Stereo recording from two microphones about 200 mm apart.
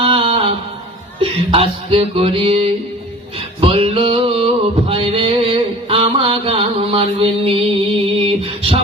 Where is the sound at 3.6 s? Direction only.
25° right (ahead or behind).